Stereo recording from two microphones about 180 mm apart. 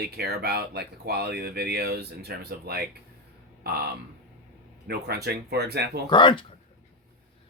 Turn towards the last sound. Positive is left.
turn(degrees=25)  # may be behind; listen again after turning